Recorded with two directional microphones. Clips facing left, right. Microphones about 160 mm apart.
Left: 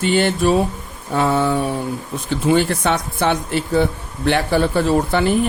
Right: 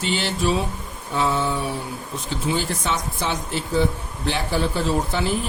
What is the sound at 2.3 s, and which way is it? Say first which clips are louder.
Speech: left 8 dB; 60° left (ahead or behind).